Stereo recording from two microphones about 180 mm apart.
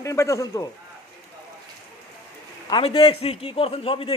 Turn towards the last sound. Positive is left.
turn(degrees=30)  # may be behind; listen again after turning